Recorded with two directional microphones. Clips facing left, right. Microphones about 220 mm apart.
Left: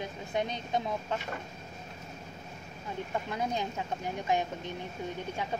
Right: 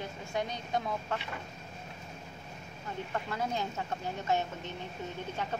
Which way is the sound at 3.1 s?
15° left (ahead or behind).